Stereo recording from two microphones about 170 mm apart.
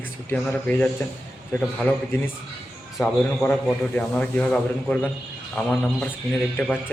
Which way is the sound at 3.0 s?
5° left (ahead or behind).